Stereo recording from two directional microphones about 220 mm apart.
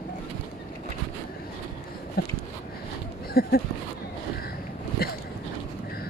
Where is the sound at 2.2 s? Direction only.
45° left (ahead or behind).